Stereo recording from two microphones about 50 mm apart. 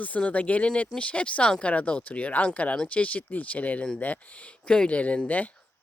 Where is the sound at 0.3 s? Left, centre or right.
Left.